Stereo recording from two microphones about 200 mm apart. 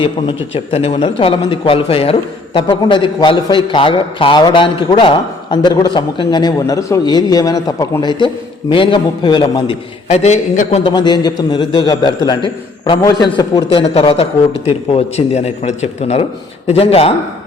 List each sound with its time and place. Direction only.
0.0 s a man's voice: 25° left (ahead or behind)
10.9 s a man's voice: 20° left (ahead or behind)
13.8 s a man's voice: 30° left (ahead or behind)